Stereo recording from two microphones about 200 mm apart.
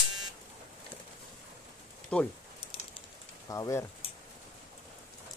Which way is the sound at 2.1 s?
5° left (ahead or behind).